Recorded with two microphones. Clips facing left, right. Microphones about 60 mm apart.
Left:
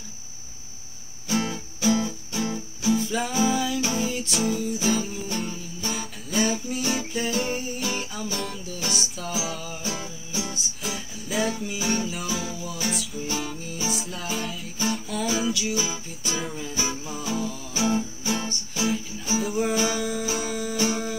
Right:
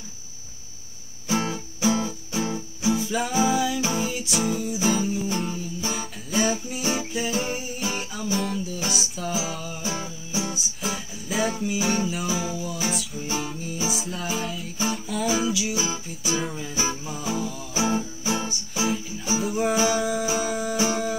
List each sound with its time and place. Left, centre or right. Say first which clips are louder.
1.3 s music: right 1 dB; centre
3.0 s music: right 1 dB; centre
17.7 s music: even; centre